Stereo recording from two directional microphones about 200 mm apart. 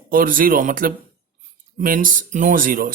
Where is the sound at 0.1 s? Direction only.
45° right (ahead or behind).